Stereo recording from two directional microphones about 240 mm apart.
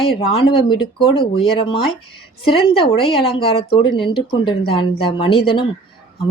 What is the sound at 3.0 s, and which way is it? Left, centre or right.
Speech, left.